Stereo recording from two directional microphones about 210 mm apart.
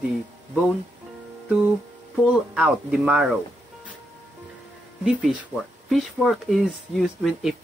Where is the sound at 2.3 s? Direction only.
5° right (ahead or behind).